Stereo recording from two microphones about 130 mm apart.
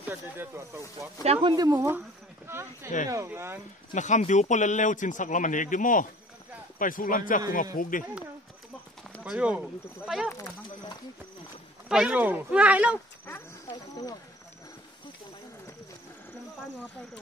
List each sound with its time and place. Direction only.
0.0 s speech: 15° right (ahead or behind)
1.4 s speech: 30° right (ahead or behind)
2.4 s speech: 20° right (ahead or behind)
3.9 s a man's voice: 70° left (ahead or behind); by 8.0 s 90° left
9.2 s speech: 10° right (ahead or behind)
11.9 s speech: 5° right (ahead or behind)
13.7 s speech: 30° left (ahead or behind)